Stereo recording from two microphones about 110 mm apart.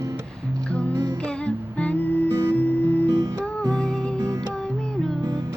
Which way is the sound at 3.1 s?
35° right (ahead or behind).